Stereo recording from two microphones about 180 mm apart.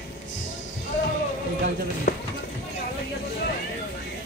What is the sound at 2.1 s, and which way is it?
Run, 55° left (ahead or behind).